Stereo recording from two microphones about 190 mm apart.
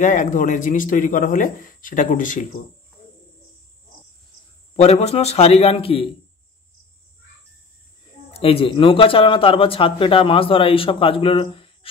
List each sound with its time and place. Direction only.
0.0 s speech: 45° left (ahead or behind)
4.7 s a man's voice: 35° left (ahead or behind)
8.3 s speech: 30° left (ahead or behind)